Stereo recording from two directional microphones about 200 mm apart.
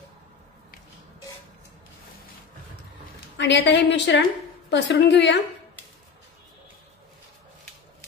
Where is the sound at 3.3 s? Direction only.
60° left (ahead or behind).